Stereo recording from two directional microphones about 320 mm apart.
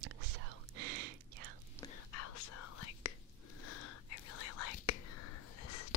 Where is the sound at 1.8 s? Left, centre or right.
Centre.